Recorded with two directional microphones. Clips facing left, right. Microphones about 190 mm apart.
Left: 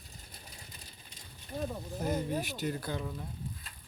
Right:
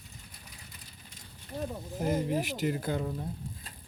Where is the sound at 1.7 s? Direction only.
5° right (ahead or behind).